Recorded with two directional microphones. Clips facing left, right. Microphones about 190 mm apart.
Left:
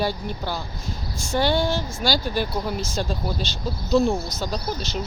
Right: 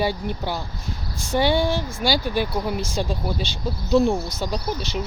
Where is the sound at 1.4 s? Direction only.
55° right (ahead or behind).